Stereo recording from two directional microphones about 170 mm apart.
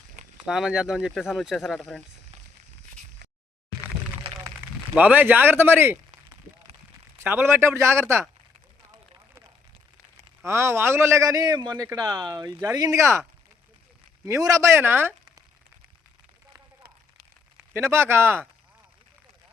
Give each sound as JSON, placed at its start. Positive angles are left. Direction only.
{"t": 0.4, "sound": "speech", "side_deg": -5}
{"t": 4.9, "sound": "speech", "side_deg": -10}
{"t": 7.2, "sound": "speech", "side_deg": -15}
{"t": 10.4, "sound": "a man's voice", "side_deg": -15}
{"t": 14.3, "sound": "speech", "side_deg": -20}
{"t": 17.6, "sound": "speech", "side_deg": -15}